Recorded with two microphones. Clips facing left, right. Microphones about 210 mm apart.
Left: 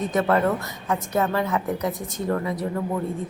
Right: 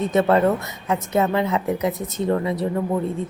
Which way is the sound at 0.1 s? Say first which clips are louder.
Right 4 dB; 25° right (ahead or behind).